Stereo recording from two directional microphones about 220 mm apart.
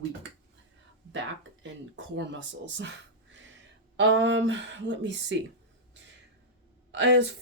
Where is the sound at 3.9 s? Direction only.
55° right (ahead or behind).